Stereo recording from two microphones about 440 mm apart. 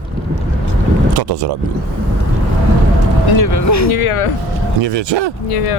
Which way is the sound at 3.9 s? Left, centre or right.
Left.